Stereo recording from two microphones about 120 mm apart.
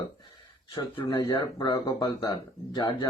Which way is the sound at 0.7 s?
35° left (ahead or behind).